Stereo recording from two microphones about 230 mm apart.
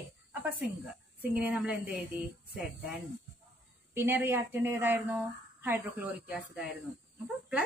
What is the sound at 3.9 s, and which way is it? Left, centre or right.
A woman's voice, centre.